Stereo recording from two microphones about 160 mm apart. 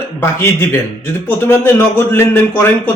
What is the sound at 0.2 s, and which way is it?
A man's voice, 15° left (ahead or behind).